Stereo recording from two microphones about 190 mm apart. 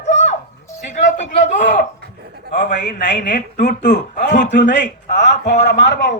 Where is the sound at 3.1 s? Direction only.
65° left (ahead or behind).